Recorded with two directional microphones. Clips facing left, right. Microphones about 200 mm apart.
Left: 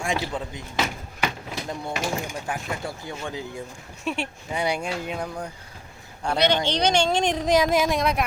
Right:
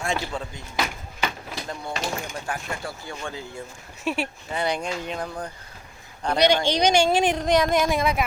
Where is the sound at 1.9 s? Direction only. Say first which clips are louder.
Left 1 dB; 10° left (ahead or behind).